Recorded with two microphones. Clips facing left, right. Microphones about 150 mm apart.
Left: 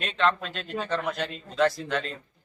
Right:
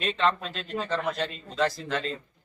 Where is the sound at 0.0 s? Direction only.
Centre (ahead or behind).